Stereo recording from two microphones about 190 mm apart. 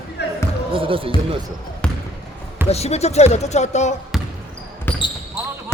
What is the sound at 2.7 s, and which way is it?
Speech, 35° left (ahead or behind).